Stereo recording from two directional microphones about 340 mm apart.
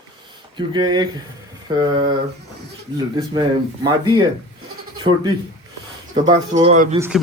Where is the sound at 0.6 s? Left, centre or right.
Centre.